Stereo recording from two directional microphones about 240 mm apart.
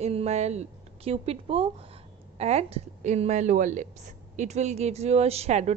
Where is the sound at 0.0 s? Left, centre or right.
Right.